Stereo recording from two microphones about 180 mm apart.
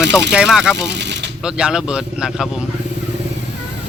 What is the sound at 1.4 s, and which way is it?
Speech, 5° right (ahead or behind).